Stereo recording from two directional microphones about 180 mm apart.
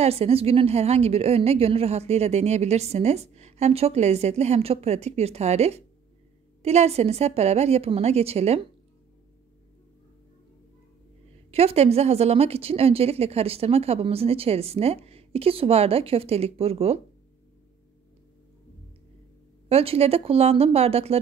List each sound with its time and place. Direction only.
0.0 s a woman's voice: 35° right (ahead or behind)
11.5 s a woman's voice: 35° right (ahead or behind)
19.7 s a woman's voice: 35° right (ahead or behind)